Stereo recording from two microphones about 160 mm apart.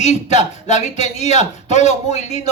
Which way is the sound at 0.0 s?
45° left (ahead or behind).